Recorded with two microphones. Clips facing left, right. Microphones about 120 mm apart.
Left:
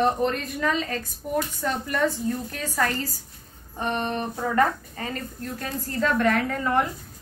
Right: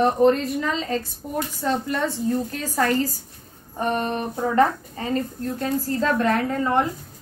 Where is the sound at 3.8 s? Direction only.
40° right (ahead or behind).